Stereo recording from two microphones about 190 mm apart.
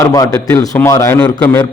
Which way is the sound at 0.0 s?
20° left (ahead or behind).